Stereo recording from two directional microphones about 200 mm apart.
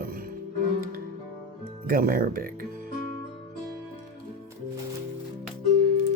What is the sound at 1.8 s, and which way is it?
Speech, 45° right (ahead or behind).